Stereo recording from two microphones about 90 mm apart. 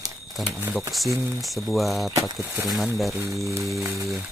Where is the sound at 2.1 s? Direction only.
35° right (ahead or behind).